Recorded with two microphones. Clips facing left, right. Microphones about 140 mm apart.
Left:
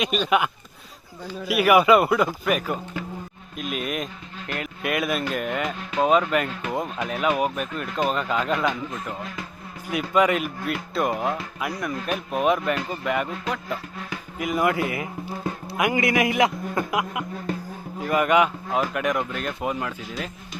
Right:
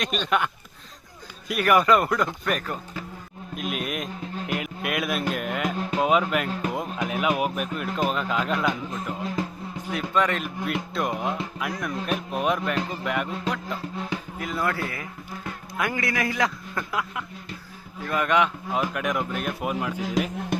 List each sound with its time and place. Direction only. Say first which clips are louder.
0.0 s a man's voice: left 3 dB; 5° left (ahead or behind)
9.9 s a man's voice: left 4 dB; 10° left (ahead or behind)
14.3 s a man's voice: left 6 dB; 10° left (ahead or behind); by 19.7 s 10° right (ahead or behind)
20.2 s music: right 8 dB; 90° right